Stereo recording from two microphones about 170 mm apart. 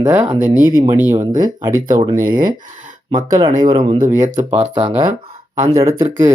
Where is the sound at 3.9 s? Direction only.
50° right (ahead or behind).